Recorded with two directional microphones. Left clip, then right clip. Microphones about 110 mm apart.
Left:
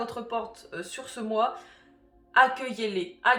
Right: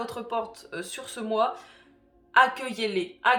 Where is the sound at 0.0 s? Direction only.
35° right (ahead or behind).